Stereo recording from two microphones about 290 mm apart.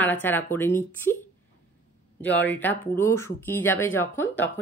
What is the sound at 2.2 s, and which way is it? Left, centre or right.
Speech, centre.